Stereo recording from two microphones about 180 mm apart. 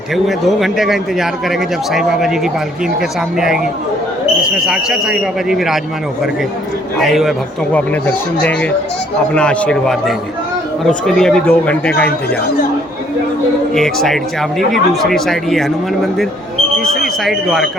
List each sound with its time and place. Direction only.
0.3 s a man's voice: centre (ahead or behind)
7.0 s a man's voice: centre (ahead or behind)
13.7 s a man's voice: centre (ahead or behind)
16.8 s speech: 55° left (ahead or behind)
17.2 s a man's voice: centre (ahead or behind)